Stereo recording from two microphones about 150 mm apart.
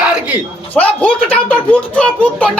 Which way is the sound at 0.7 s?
10° left (ahead or behind).